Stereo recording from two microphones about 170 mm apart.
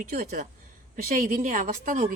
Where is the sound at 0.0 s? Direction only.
60° right (ahead or behind).